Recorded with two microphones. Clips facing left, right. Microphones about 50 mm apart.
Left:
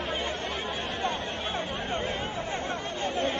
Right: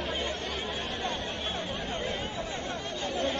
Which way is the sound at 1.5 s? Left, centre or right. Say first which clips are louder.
Left 5 dB; left.